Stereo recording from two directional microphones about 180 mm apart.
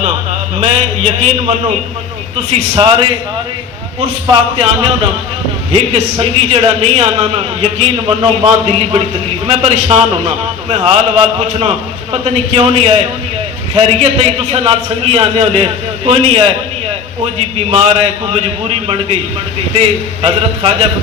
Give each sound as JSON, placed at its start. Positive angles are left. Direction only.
{"t": 0.6, "sound": "a man's voice", "side_deg": -40}
{"t": 20.2, "sound": "a man's voice", "side_deg": -30}